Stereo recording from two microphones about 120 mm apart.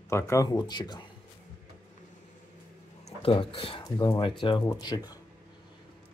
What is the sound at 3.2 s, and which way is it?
Speech, 50° left (ahead or behind).